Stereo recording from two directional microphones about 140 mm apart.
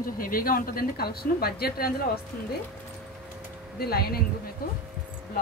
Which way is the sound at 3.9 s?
90° left.